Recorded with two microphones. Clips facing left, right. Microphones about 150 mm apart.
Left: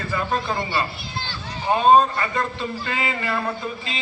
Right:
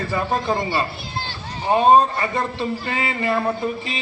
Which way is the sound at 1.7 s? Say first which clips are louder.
Right 1 dB; 20° right (ahead or behind).